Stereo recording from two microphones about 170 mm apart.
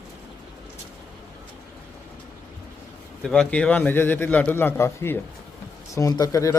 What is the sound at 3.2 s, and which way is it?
Speech, 5° left (ahead or behind).